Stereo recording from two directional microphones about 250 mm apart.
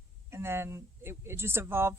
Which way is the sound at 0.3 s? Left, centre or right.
Centre.